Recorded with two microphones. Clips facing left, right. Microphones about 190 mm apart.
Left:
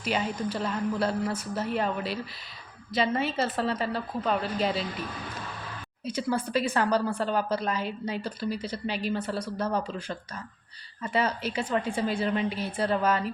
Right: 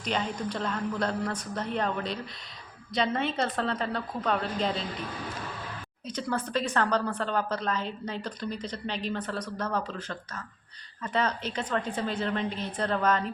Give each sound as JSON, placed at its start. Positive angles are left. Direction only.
{"t": 0.0, "sound": "a woman's voice", "side_deg": 5}
{"t": 6.1, "sound": "a woman's voice", "side_deg": 10}